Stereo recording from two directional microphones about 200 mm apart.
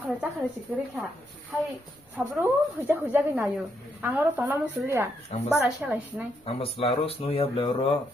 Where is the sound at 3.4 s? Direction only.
Centre (ahead or behind).